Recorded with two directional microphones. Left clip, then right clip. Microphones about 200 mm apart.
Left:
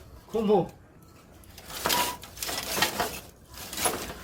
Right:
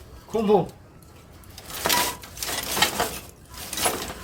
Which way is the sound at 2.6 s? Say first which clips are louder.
Right 4 dB; 5° right (ahead or behind).